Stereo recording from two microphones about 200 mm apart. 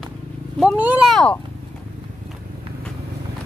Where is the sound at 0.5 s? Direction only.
5° right (ahead or behind).